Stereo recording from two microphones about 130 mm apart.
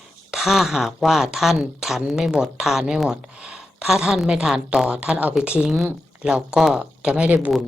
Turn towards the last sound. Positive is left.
turn(degrees=-10)  # may be behind; listen again after turning